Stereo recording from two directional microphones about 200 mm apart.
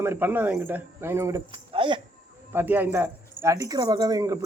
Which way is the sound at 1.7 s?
25° right (ahead or behind).